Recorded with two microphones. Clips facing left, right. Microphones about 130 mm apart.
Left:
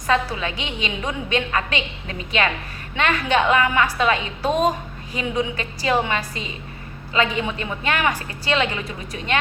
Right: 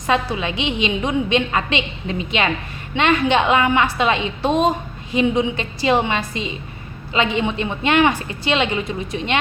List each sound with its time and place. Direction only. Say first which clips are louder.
0.1 s a woman's voice: right 2 dB; 20° right (ahead or behind)